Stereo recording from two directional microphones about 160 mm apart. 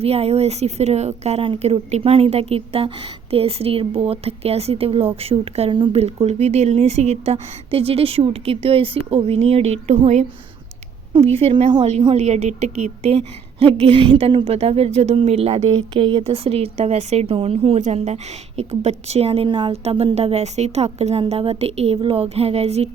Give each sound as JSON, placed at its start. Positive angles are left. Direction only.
{"t": 0.0, "sound": "a woman's voice", "side_deg": -40}
{"t": 15.7, "sound": "a woman's voice", "side_deg": -30}